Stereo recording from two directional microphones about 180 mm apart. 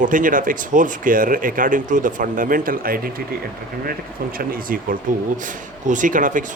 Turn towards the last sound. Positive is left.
turn(degrees=-45)  # may be behind; listen again after turning